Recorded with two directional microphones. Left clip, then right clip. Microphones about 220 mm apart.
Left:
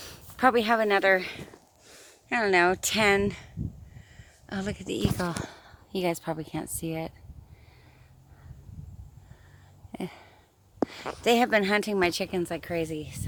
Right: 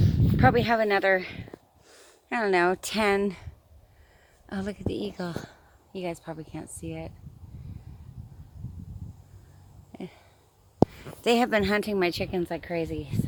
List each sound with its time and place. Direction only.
0.0 s a woman's voice: centre (ahead or behind)
5.1 s speech: 25° left (ahead or behind)
5.4 s speech: 35° left (ahead or behind)
9.9 s a sound: 30° left (ahead or behind)
11.2 s a woman's voice: centre (ahead or behind)